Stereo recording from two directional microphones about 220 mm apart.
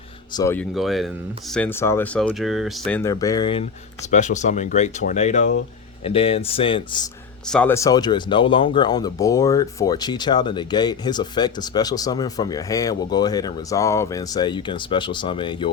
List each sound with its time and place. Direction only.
0.3 s speech: 10° left (ahead or behind)
4.1 s speech: 35° left (ahead or behind)
7.4 s speech: 5° left (ahead or behind); by 15.7 s 20° left (ahead or behind)